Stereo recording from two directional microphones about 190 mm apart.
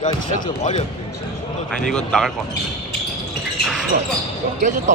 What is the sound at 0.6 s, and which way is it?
Speech, 40° left (ahead or behind).